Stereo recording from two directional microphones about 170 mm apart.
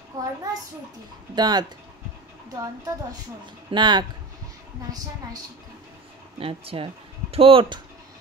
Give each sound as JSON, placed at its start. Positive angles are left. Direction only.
{"t": 0.1, "sound": "a woman's voice", "side_deg": -20}
{"t": 1.3, "sound": "a woman's voice", "side_deg": -25}
{"t": 6.4, "sound": "speech", "side_deg": -35}